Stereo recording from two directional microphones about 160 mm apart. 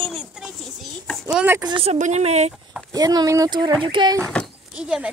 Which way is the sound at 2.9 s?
25° right (ahead or behind).